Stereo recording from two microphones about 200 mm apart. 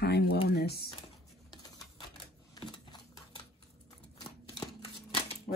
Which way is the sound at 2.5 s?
20° left (ahead or behind).